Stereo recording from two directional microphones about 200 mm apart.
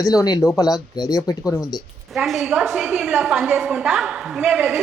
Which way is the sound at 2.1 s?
Centre (ahead or behind).